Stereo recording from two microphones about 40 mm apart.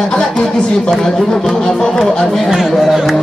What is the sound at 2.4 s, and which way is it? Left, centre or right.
Speech, centre.